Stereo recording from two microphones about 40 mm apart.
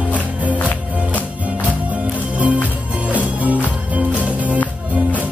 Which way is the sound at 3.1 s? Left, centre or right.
Right.